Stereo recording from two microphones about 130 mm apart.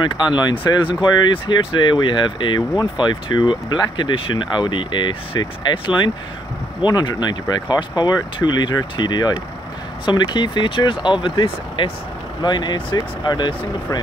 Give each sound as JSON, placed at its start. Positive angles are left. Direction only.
{"t": 0.0, "sound": "speech", "side_deg": 35}